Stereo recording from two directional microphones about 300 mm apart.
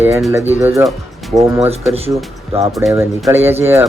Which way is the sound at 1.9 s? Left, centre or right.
Centre.